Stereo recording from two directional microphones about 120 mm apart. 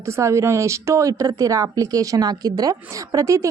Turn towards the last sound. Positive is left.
turn(degrees=-25)  # may be behind; listen again after turning